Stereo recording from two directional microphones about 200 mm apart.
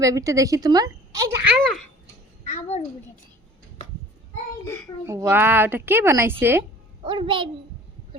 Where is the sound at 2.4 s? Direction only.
30° left (ahead or behind).